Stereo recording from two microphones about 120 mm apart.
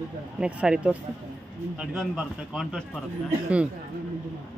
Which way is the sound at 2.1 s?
Centre (ahead or behind).